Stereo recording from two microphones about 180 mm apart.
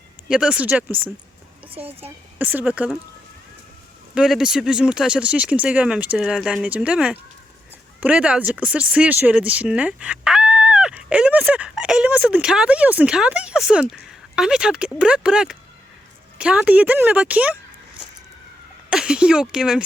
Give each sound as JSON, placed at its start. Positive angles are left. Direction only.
{"t": 0.3, "sound": "speech", "side_deg": -5}
{"t": 1.6, "sound": "speech", "side_deg": -30}
{"t": 2.0, "sound": "speech", "side_deg": -10}
{"t": 4.1, "sound": "speech", "side_deg": -5}
{"t": 18.9, "sound": "speech", "side_deg": -5}